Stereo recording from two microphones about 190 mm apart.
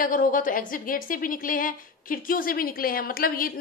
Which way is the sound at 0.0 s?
45° left (ahead or behind).